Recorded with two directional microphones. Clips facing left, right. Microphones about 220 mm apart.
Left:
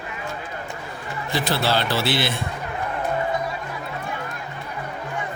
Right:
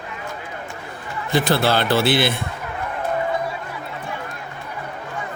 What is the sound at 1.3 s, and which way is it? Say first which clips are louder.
A man's voice: right 4 dB; 55° right (ahead or behind).